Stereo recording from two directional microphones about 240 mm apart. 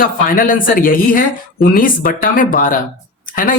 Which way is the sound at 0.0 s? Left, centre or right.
Left.